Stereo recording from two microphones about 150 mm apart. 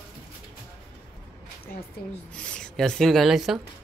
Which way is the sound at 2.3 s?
5° left (ahead or behind).